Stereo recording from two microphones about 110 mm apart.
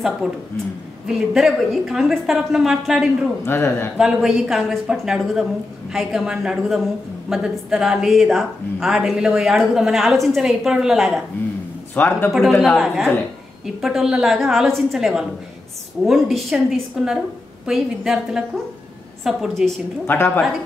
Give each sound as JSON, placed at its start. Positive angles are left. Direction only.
{"t": 0.2, "sound": "a woman's voice", "side_deg": -5}
{"t": 3.4, "sound": "speech", "side_deg": 20}
{"t": 3.9, "sound": "a woman's voice", "side_deg": -5}
{"t": 11.9, "sound": "speech", "side_deg": 15}
{"t": 12.3, "sound": "a woman's voice", "side_deg": 0}
{"t": 20.1, "sound": "speech", "side_deg": 15}